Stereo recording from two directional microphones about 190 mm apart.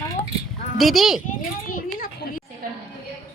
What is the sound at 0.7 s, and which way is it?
Speech, centre (ahead or behind).